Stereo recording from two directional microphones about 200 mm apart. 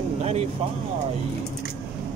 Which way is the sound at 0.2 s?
30° right (ahead or behind).